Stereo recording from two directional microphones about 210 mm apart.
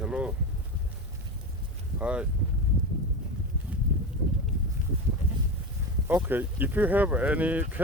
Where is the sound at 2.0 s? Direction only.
5° right (ahead or behind).